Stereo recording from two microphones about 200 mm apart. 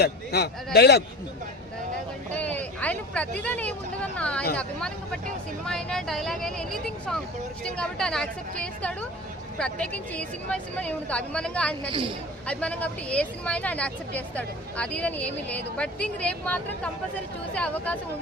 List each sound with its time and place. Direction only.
0.0 s a man's voice: 55° left (ahead or behind)
2.3 s speech: 5° left (ahead or behind)
11.9 s speech: 25° right (ahead or behind)
12.5 s speech: 5° left (ahead or behind)